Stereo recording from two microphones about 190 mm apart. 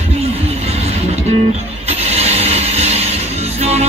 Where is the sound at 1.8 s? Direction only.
35° right (ahead or behind).